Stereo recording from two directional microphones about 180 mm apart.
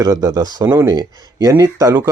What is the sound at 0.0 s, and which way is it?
Speech, 20° right (ahead or behind).